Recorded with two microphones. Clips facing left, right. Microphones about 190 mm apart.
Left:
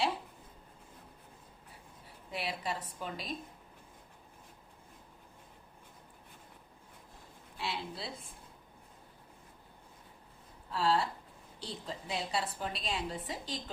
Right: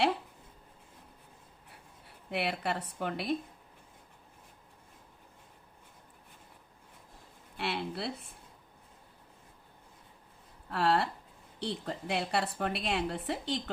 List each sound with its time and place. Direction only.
2.3 s a woman's voice: 65° right (ahead or behind)
7.5 s a sound: 65° right (ahead or behind)
10.7 s a woman's voice: 65° right (ahead or behind)